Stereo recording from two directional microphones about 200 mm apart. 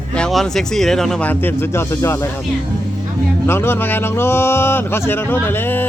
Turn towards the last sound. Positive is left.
turn(degrees=10)  # may be behind; listen again after turning